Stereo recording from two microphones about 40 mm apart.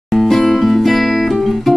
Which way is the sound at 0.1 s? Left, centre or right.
Centre.